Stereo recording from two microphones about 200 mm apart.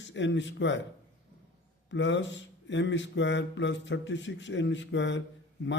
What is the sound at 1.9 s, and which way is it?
Speech, 65° left (ahead or behind).